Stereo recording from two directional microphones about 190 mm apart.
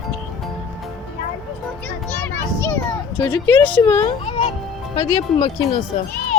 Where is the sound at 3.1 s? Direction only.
20° left (ahead or behind).